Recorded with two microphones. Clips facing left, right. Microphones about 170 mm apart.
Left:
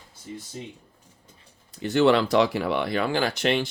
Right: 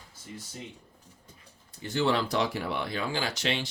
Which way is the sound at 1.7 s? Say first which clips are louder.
Left 8 dB; 75° left (ahead or behind).